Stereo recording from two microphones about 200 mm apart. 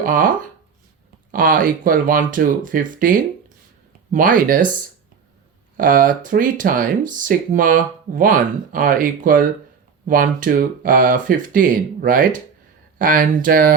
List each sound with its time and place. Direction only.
0.0 s speech: 45° right (ahead or behind)
1.3 s speech: 40° right (ahead or behind)
5.7 s speech: 45° right (ahead or behind)